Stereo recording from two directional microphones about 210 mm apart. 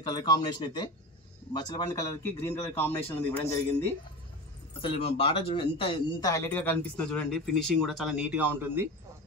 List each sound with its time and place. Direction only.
0.0 s speech: 20° left (ahead or behind)
4.8 s speech: 25° left (ahead or behind); by 8.8 s 10° right (ahead or behind)